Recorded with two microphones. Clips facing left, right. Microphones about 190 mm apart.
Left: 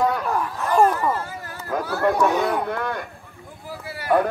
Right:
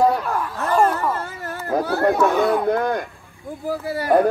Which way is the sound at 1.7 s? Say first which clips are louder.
Right 4 dB; 30° right (ahead or behind).